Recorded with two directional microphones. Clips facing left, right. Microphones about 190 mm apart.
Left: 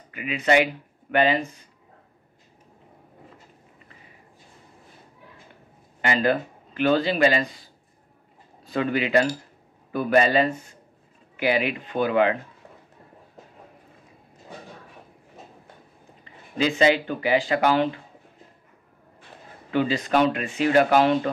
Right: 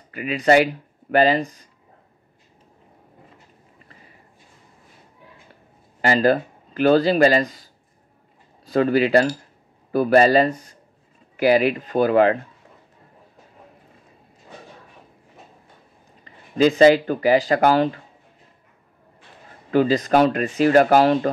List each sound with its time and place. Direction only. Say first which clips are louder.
0.1 s speech: right 4 dB; 35° right (ahead or behind)
5.9 s speech: right 5 dB; 35° right (ahead or behind)
16.5 s speech: right 7 dB; 40° right (ahead or behind)
19.7 s speech: right 5 dB; 40° right (ahead or behind)